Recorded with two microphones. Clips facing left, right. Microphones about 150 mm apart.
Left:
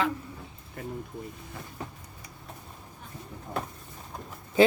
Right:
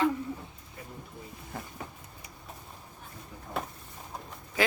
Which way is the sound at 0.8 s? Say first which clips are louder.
Left 9 dB; 55° left (ahead or behind).